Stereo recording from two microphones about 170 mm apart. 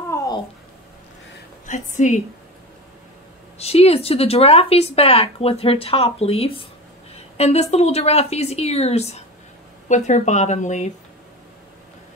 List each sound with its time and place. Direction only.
0.1 s babbling: 20° left (ahead or behind)
1.7 s speech: 45° left (ahead or behind)
3.5 s speech: 35° left (ahead or behind)